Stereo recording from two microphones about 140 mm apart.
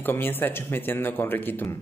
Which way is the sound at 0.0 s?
15° left (ahead or behind).